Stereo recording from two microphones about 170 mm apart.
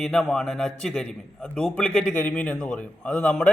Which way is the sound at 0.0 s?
Centre (ahead or behind).